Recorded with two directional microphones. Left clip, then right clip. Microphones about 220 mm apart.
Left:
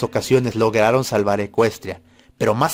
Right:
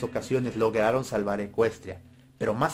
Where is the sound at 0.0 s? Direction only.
45° left (ahead or behind).